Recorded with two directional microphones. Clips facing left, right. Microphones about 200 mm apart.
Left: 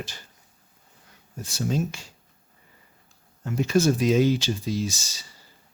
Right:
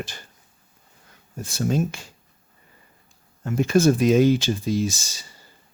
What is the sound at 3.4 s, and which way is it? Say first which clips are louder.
Speech: right 3 dB; 50° right (ahead or behind).